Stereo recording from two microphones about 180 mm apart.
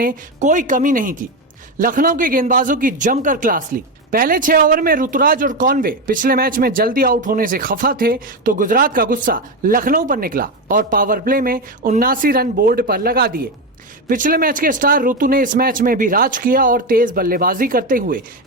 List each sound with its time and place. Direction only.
0.0 s speech: 45° right (ahead or behind)